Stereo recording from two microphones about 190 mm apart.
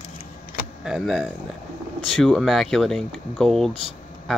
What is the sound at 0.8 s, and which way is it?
Speech, centre (ahead or behind).